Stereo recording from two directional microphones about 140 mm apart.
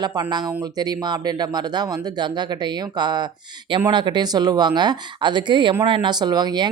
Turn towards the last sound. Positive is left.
turn(degrees=-30)  # may be behind; listen again after turning